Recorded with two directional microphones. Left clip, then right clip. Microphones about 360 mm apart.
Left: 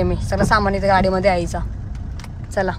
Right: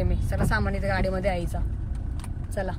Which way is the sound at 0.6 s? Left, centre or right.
Left.